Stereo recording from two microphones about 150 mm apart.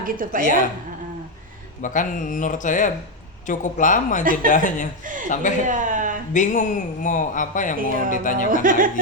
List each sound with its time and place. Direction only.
0.0 s a woman's voice: 65° right (ahead or behind)
1.8 s speech: 60° left (ahead or behind)
5.6 s speech: 60° right (ahead or behind)
6.3 s speech: 55° left (ahead or behind)
8.4 s a woman's voice: 65° right (ahead or behind)